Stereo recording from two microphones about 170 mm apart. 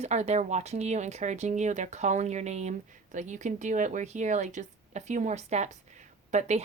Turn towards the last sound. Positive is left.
turn(degrees=-45)  # may be behind; listen again after turning